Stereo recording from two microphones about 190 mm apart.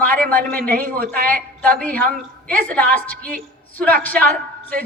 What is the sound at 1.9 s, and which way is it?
Speech, 50° right (ahead or behind).